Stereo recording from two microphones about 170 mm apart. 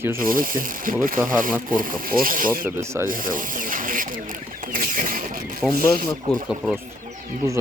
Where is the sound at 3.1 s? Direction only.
55° right (ahead or behind).